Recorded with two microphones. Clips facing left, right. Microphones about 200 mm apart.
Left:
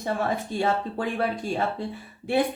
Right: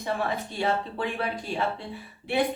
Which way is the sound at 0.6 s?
50° left (ahead or behind).